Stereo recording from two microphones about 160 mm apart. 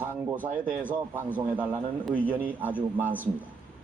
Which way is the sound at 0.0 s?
15° right (ahead or behind).